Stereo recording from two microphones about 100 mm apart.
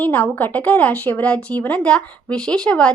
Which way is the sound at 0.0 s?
15° left (ahead or behind).